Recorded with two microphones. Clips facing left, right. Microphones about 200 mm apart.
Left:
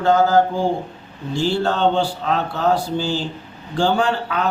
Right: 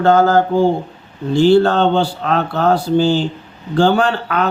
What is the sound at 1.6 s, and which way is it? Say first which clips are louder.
A man's voice: right 4 dB; 65° right (ahead or behind).